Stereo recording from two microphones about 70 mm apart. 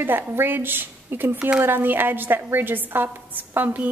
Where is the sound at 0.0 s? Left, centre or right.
Right.